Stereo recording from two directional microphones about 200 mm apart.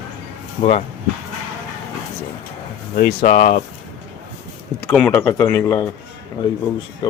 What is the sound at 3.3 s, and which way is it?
Speech, 35° left (ahead or behind).